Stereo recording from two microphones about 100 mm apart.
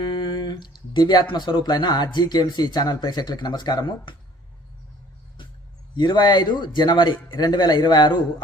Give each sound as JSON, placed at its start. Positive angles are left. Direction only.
{"t": 0.0, "sound": "speech", "side_deg": 50}
{"t": 6.0, "sound": "speech", "side_deg": 50}